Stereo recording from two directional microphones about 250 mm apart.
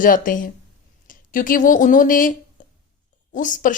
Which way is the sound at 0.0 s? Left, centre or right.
Left.